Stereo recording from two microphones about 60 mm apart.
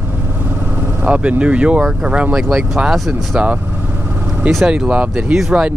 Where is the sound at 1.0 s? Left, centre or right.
Right.